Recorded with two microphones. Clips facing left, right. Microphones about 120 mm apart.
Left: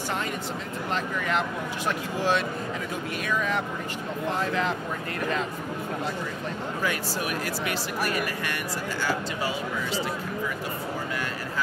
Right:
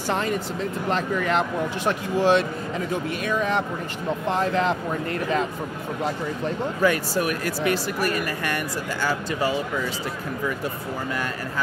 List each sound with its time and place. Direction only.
1.9 s speech: 25° right (ahead or behind)
6.8 s speech: 50° right (ahead or behind)